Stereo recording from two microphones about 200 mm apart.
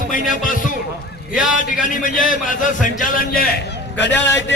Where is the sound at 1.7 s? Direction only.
40° left (ahead or behind).